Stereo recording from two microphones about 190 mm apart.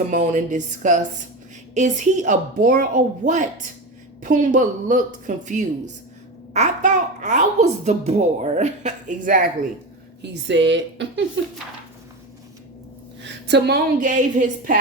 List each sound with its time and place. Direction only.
0.1 s a child's voice: 40° right (ahead or behind)
10.2 s speech: 65° right (ahead or behind)
13.2 s a sound: 60° right (ahead or behind)
14.0 s a child's voice: 40° right (ahead or behind)